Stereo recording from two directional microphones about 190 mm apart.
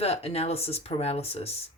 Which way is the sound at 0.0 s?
30° left (ahead or behind).